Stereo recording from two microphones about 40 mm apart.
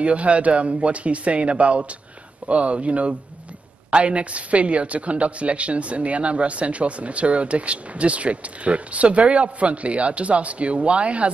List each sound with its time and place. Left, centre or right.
0.0 s a woman's voice: right